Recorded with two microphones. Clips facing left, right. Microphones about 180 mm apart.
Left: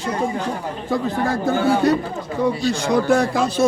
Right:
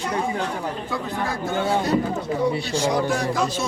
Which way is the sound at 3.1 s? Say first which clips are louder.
Left 5 dB; 55° left (ahead or behind).